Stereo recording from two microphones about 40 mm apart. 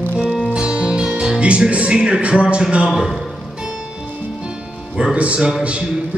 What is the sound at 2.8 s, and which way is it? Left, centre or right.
Music, centre.